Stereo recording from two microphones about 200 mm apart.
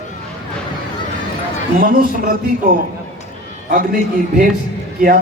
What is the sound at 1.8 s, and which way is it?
Speech, 45° right (ahead or behind).